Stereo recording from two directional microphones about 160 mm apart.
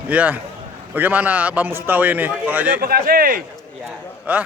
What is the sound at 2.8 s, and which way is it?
Speech, 65° right (ahead or behind).